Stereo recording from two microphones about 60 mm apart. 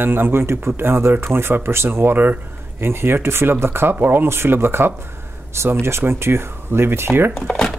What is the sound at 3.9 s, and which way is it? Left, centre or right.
Speech, right.